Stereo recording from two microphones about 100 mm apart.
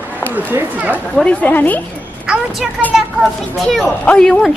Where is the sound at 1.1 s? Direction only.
10° left (ahead or behind).